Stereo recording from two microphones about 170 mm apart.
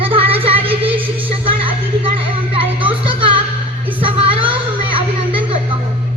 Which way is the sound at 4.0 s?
30° right (ahead or behind).